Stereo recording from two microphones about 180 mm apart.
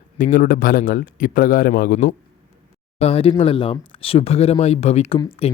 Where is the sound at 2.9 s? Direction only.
30° left (ahead or behind).